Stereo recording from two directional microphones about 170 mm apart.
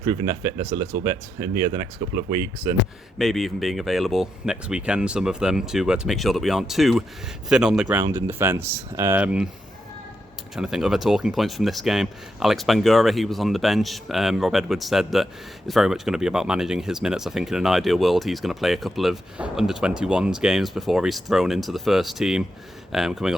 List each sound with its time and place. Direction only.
0.0 s speech: 20° right (ahead or behind)
3.2 s speech: centre (ahead or behind)
10.5 s speech: 5° right (ahead or behind)